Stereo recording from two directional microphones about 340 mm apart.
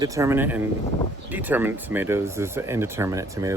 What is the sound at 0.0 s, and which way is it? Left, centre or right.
Speech, centre.